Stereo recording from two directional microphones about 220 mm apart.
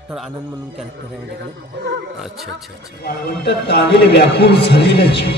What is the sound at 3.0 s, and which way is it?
A man's voice, 50° left (ahead or behind).